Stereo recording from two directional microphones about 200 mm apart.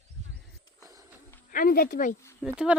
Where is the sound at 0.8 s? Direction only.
15° right (ahead or behind).